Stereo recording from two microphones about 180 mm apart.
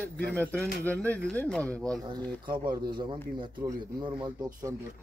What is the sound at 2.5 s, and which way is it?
Speech, 25° right (ahead or behind).